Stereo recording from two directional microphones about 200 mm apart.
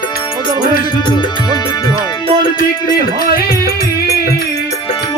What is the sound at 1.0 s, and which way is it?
Music, 25° left (ahead or behind).